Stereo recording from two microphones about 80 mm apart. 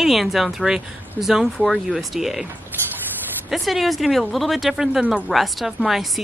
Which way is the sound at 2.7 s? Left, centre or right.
Right.